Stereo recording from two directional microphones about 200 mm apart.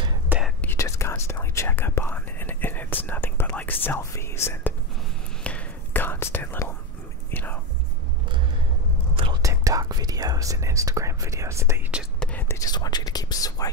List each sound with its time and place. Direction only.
0.6 s whispering: 10° left (ahead or behind)
9.1 s whispering: 25° right (ahead or behind); by 13.7 s 20° left (ahead or behind)